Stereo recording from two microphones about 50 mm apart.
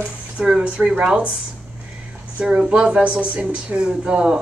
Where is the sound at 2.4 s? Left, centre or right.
Centre.